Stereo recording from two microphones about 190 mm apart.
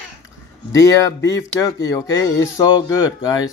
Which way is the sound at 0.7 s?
15° left (ahead or behind).